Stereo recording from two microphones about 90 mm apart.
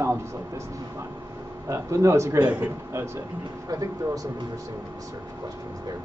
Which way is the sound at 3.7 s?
40° right (ahead or behind).